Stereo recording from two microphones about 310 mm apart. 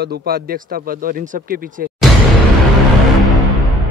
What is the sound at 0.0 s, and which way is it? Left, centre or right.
Speech, right.